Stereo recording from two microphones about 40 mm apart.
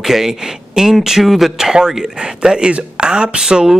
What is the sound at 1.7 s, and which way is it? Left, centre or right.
Speech, centre.